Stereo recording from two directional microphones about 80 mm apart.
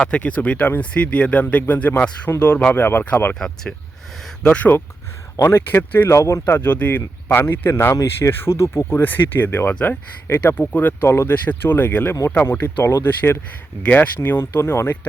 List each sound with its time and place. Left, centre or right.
0.1 s speech: centre
3.3 s speech: centre
4.4 s speech: centre
6.1 s speech: left
6.4 s speech: left
10.2 s speech: left
13.8 s speech: left